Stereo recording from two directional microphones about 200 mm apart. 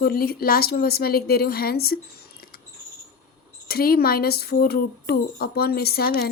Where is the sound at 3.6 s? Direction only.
50° left (ahead or behind).